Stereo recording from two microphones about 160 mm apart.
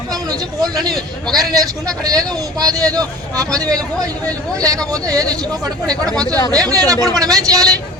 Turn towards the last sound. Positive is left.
turn(degrees=-20)  # may be behind; listen again after turning